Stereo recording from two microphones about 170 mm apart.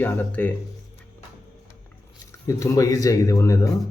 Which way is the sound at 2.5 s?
20° left (ahead or behind).